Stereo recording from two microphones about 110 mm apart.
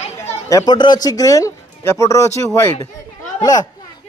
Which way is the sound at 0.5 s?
30° left (ahead or behind).